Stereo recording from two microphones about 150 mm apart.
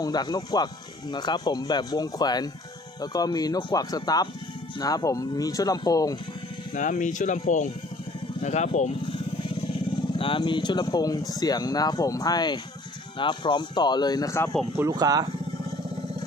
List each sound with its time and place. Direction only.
0.0 s speech: 25° left (ahead or behind)
6.7 s speech: 55° left (ahead or behind)
9.0 s vehicle: 35° left (ahead or behind)
10.1 s speech: 35° left (ahead or behind); by 14.5 s 20° left (ahead or behind)
14.8 s speech: 25° right (ahead or behind)